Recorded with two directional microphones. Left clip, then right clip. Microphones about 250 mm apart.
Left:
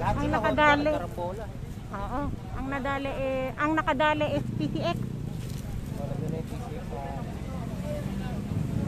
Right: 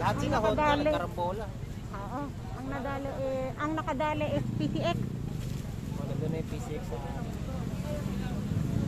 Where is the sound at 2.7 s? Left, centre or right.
Left; by 5.0 s centre.